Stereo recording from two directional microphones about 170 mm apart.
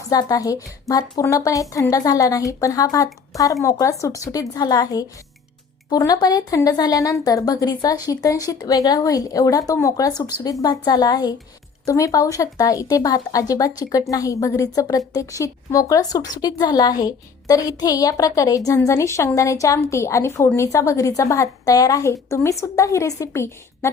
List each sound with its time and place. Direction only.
0.1 s a woman's voice: 20° left (ahead or behind)